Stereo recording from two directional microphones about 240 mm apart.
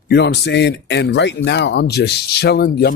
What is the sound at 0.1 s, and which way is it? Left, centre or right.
Speech, left.